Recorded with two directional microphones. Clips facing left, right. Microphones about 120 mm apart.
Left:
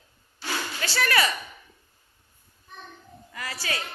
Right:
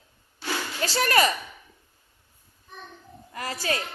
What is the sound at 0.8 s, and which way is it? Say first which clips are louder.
Music: right 3 dB; 40° right (ahead or behind).